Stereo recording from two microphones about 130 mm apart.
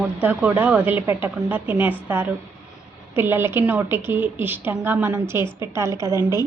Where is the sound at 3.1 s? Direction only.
15° right (ahead or behind).